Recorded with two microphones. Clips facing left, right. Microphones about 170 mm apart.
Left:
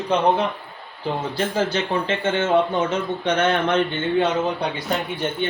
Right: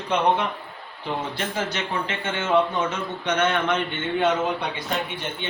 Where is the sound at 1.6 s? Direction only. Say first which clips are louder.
Left 6 dB; 30° left (ahead or behind).